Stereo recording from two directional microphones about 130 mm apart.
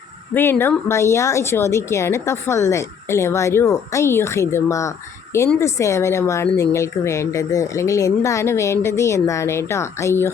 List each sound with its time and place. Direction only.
0.6 s speech: 20° left (ahead or behind)